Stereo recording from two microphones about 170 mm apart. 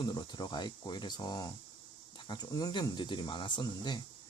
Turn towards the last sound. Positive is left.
turn(degrees=25)  # may be behind; listen again after turning